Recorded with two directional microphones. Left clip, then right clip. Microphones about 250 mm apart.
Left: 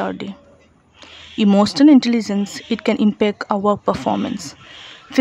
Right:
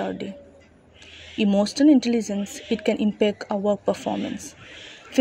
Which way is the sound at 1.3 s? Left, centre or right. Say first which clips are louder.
Left 6 dB; centre.